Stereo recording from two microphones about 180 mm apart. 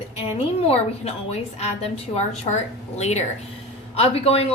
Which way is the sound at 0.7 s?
35° left (ahead or behind).